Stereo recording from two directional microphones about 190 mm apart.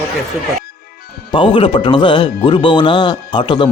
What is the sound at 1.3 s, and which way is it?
Speech, 25° left (ahead or behind).